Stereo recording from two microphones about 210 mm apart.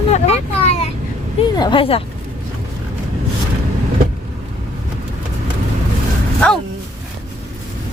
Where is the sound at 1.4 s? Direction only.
25° left (ahead or behind).